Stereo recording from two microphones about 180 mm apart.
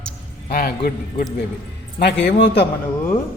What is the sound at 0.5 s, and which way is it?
Speech, 55° left (ahead or behind).